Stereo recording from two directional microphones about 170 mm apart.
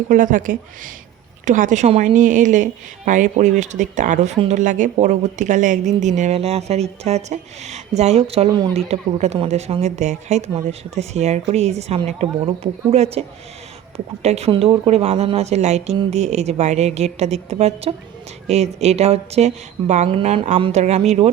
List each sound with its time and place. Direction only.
0.1 s a woman's voice: 50° right (ahead or behind)